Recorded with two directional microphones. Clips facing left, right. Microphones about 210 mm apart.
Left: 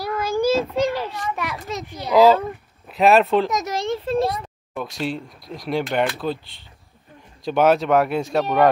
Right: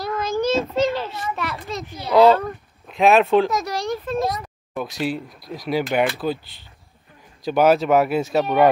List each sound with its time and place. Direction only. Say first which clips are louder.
0.0 s children playing: left 1 dB; 10° left (ahead or behind)
2.1 s speech: even; centre (ahead or behind)
3.5 s a sound: even; 20° left (ahead or behind)
4.7 s speech: right 2 dB; centre (ahead or behind)